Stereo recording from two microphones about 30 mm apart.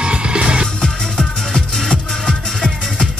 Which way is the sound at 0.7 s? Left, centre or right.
Left.